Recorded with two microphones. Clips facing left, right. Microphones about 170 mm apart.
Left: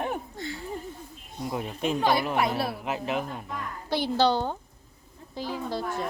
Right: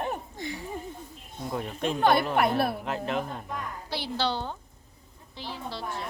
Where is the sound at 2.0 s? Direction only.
55° right (ahead or behind).